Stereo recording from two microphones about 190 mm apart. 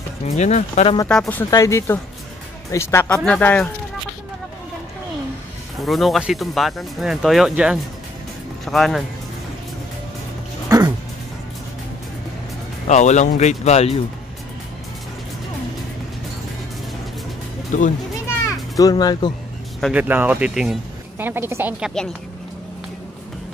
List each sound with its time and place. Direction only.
0.4 s speech: 40° left (ahead or behind)
1.0 s speech: 5° left (ahead or behind)
1.4 s speech: 15° left (ahead or behind)
5.8 s speech: centre (ahead or behind)
12.8 s speech: 40° left (ahead or behind)
17.7 s speech: 40° left (ahead or behind)
18.4 s children playing: 20° left (ahead or behind)
19.8 s speech: 10° right (ahead or behind)